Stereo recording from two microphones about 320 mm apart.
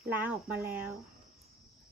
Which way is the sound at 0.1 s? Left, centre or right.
Centre.